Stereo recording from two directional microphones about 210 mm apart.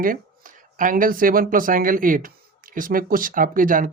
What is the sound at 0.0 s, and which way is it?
Speech, 40° right (ahead or behind).